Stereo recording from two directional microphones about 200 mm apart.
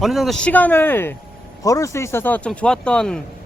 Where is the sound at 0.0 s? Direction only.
Centre (ahead or behind).